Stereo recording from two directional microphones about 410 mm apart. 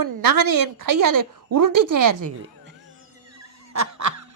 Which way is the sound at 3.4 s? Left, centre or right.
Right.